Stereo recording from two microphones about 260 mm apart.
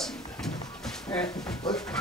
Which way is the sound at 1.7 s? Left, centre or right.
Centre.